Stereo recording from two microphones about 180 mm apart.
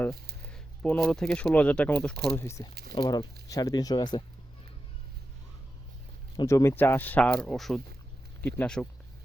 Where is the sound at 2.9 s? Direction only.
25° left (ahead or behind).